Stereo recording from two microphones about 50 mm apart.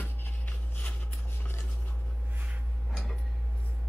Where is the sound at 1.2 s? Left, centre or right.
Left.